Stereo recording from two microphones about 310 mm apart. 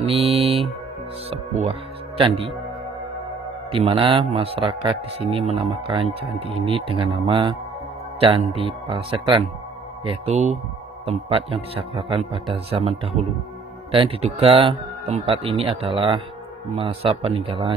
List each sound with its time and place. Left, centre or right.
0.0 s mantra: centre
1.3 s speech: centre
3.7 s a man's voice: centre